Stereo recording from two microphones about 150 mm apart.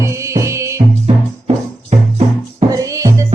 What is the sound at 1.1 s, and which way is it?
Music, 40° right (ahead or behind).